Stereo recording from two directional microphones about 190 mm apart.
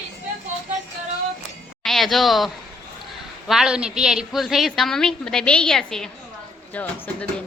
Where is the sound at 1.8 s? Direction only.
Centre (ahead or behind).